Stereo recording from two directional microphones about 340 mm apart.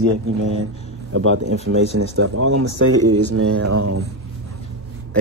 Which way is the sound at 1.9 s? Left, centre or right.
Right.